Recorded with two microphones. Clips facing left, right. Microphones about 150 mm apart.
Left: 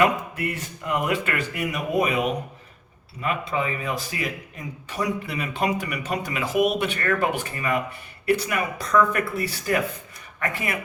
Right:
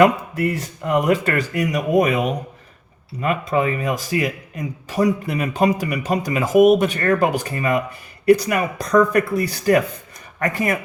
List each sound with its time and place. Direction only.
0.0 s speech: 35° right (ahead or behind)